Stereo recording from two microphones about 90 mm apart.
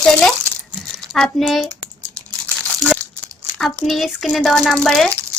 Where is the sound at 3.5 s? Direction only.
Centre (ahead or behind).